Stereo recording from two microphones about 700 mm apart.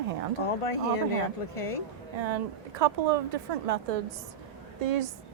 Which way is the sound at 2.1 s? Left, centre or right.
Right.